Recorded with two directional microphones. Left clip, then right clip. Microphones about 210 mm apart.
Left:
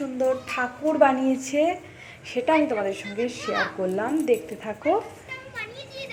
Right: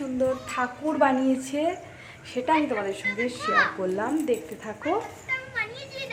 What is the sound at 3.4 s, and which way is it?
Speech, 40° left (ahead or behind).